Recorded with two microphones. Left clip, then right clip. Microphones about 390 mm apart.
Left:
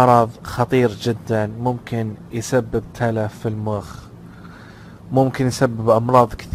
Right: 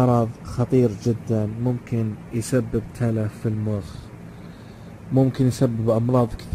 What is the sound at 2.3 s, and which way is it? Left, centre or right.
Speech, centre.